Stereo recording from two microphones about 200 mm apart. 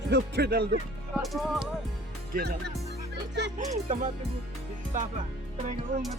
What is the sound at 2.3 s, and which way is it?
Speech, 45° right (ahead or behind).